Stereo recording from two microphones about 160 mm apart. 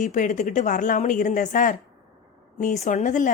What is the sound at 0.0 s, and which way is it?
A woman's voice, 55° left (ahead or behind).